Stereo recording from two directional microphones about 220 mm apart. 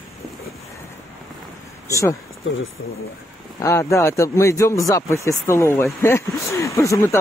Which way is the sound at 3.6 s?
15° left (ahead or behind).